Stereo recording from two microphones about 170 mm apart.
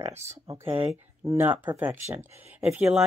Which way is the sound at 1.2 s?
15° right (ahead or behind).